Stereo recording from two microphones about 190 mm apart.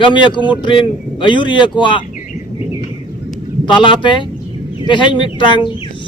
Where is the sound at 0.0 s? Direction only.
25° left (ahead or behind).